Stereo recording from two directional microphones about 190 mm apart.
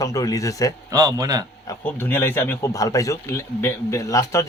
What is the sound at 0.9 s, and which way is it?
Speech, 20° right (ahead or behind).